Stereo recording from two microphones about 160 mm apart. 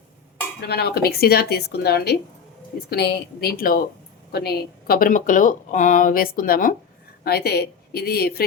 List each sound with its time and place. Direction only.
0.7 s a woman's voice: 80° left
4.3 s speech: 80° left; by 6.7 s 60° left (ahead or behind)
7.3 s a woman's voice: 85° left